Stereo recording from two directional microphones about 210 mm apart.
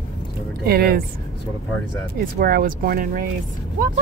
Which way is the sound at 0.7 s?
45° right (ahead or behind).